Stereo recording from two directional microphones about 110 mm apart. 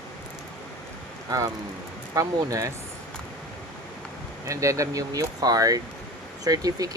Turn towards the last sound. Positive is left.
turn(degrees=-35)  # may be behind; listen again after turning